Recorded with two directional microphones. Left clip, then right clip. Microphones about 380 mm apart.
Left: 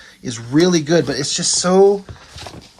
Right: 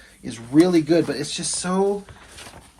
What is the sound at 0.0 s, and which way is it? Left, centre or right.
Speech, centre.